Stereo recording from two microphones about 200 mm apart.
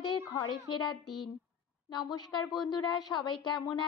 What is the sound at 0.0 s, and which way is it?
A woman's voice, 20° left (ahead or behind).